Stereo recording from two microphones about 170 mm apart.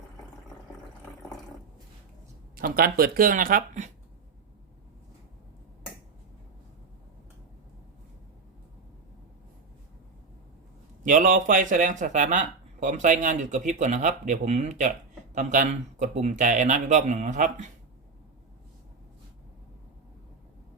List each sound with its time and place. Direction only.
2.6 s speech: 60° right (ahead or behind)
11.0 s speech: 50° right (ahead or behind)